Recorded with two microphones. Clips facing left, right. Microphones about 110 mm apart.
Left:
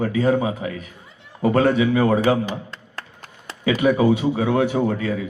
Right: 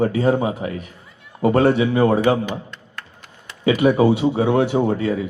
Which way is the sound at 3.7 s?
30° right (ahead or behind).